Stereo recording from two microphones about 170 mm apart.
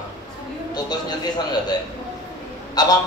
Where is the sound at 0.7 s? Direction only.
25° left (ahead or behind).